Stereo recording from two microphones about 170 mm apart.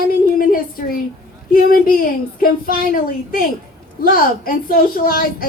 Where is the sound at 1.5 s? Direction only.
60° left (ahead or behind).